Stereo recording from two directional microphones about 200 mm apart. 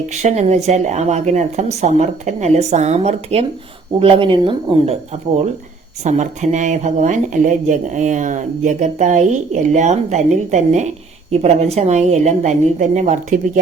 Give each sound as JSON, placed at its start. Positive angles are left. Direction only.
{"t": 0.1, "sound": "speech", "side_deg": -35}
{"t": 6.0, "sound": "speech", "side_deg": -35}